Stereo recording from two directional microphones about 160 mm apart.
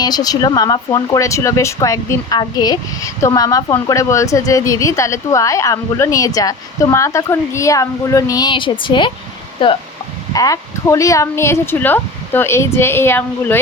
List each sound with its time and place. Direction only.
0.0 s speech: 25° left (ahead or behind)
10.3 s speech: 20° left (ahead or behind)